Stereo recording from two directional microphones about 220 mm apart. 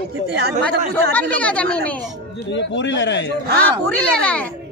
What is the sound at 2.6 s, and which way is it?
Speech, 55° left (ahead or behind).